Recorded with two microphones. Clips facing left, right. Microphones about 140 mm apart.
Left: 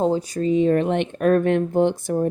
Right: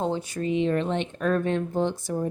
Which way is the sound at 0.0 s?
40° left (ahead or behind).